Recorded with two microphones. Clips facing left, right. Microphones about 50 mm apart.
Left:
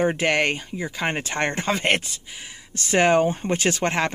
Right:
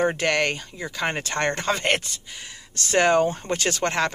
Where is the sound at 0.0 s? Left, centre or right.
Centre.